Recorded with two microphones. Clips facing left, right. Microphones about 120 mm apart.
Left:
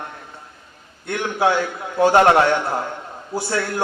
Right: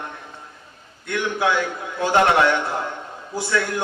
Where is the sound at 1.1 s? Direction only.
40° left (ahead or behind).